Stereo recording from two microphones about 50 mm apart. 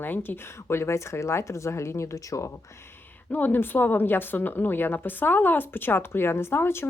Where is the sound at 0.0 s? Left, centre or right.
Left.